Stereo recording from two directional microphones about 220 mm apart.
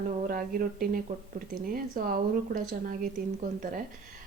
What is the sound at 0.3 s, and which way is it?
Speech, 40° right (ahead or behind).